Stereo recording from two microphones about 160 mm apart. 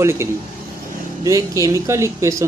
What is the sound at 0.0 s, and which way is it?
Speech, 15° right (ahead or behind).